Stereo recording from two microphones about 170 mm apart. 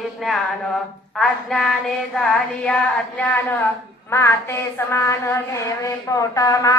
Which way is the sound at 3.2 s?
10° left (ahead or behind).